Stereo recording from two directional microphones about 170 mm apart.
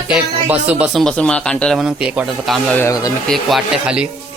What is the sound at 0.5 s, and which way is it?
Speech, 10° right (ahead or behind).